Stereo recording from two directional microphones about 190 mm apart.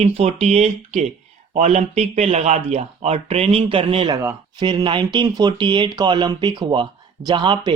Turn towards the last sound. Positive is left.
turn(degrees=-25)  # may be behind; listen again after turning